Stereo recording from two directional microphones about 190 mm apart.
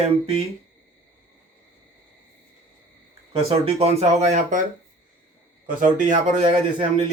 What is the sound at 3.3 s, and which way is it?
Speech, 30° right (ahead or behind).